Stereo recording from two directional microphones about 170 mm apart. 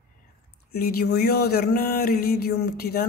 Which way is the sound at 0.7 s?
65° left (ahead or behind).